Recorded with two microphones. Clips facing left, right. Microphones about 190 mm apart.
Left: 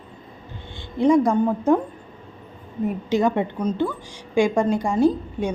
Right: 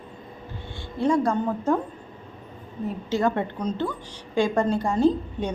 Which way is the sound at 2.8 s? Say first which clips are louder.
Left 3 dB; 15° left (ahead or behind).